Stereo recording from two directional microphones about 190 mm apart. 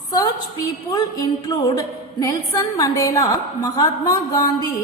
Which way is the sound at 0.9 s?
20° left (ahead or behind).